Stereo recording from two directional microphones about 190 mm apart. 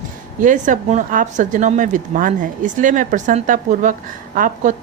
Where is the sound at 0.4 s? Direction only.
40° right (ahead or behind).